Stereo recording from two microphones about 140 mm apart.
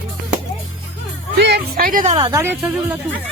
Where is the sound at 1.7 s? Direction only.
85° right.